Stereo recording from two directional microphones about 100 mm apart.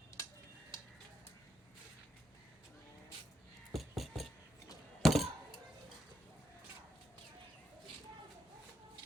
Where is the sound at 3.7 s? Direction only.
Centre (ahead or behind).